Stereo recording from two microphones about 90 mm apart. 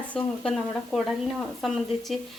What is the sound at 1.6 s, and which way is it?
Speech, centre (ahead or behind).